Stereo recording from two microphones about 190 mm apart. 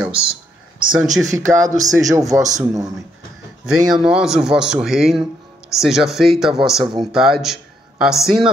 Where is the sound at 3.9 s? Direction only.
5° right (ahead or behind).